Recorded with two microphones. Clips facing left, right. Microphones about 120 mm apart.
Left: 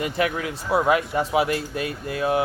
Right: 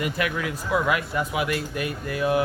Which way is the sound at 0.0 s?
30° left (ahead or behind).